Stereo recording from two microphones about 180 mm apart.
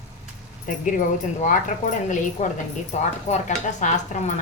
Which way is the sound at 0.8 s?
45° left (ahead or behind).